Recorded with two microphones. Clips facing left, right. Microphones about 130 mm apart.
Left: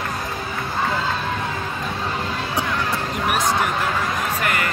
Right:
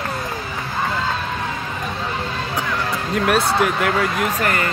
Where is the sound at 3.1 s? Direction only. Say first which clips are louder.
Right 5 dB; 85° right.